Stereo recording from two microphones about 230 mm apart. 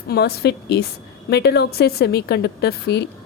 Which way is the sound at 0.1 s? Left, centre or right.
Left.